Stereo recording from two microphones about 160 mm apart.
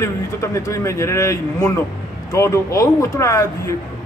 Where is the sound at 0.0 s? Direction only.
20° left (ahead or behind).